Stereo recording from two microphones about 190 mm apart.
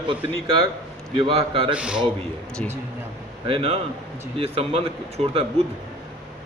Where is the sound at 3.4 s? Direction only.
30° right (ahead or behind).